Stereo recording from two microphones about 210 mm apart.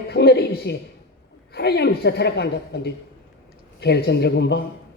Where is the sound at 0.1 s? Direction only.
50° left (ahead or behind).